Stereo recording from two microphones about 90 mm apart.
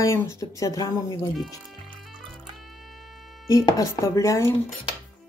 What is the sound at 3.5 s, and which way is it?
Speech, 35° left (ahead or behind).